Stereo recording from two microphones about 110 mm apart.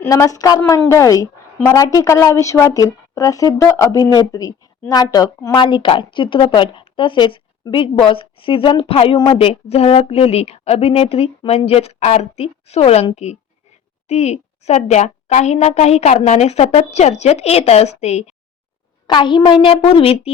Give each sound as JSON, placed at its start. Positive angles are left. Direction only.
{"t": 0.0, "sound": "a woman's voice", "side_deg": 30}
{"t": 5.5, "sound": "a woman's voice", "side_deg": 45}
{"t": 14.1, "sound": "a woman's voice", "side_deg": 80}
{"t": 19.0, "sound": "a woman's voice", "side_deg": 45}